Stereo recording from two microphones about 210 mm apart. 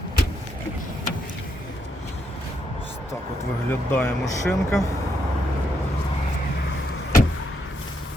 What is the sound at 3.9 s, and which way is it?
Speech, 5° left (ahead or behind).